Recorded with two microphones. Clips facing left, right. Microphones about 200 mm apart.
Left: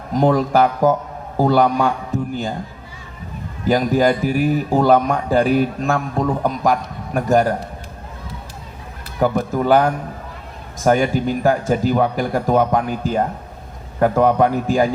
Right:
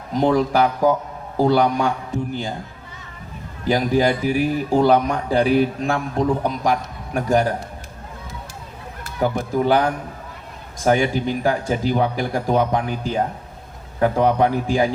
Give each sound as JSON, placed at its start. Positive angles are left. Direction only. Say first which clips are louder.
{"t": 0.2, "sound": "a man's voice", "louder": "left 2 dB", "side_deg": 45}
{"t": 3.7, "sound": "a man's voice", "louder": "left 2 dB", "side_deg": 45}
{"t": 9.2, "sound": "a man's voice", "louder": "left 2 dB", "side_deg": 45}